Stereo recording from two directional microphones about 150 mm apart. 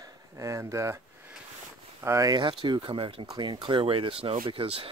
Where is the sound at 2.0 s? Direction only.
20° right (ahead or behind).